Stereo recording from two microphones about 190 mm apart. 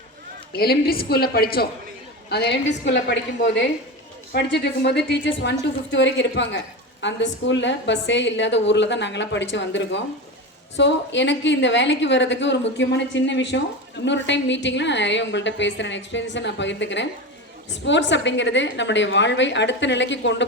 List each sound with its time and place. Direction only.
0.5 s a woman's voice: 55° left (ahead or behind)